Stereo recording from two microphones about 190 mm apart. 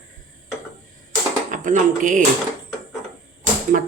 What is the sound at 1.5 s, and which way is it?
Speech, 40° right (ahead or behind).